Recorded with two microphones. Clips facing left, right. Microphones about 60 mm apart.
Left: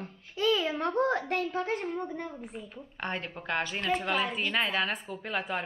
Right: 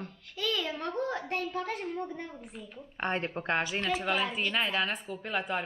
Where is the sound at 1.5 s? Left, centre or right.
Left.